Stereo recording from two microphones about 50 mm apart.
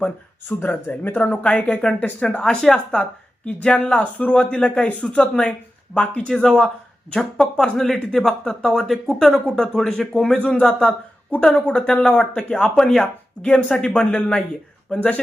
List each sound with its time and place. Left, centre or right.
0.4 s speech: left
2.4 s speech: centre; by 4.4 s left
4.4 s speech: centre
10.3 s speech: centre
12.7 s speech: centre
13.0 s speech: centre